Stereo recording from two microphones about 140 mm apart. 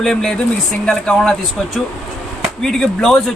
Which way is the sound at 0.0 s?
5° left (ahead or behind).